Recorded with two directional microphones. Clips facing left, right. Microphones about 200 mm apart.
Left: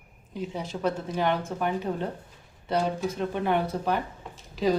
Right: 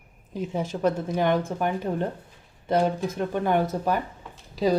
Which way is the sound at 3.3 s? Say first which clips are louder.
Right 4 dB; 45° right (ahead or behind).